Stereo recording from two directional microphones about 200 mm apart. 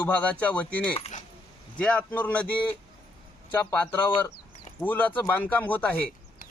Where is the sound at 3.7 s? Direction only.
10° left (ahead or behind).